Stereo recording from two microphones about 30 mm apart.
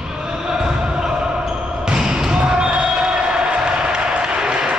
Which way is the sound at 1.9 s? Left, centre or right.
Right.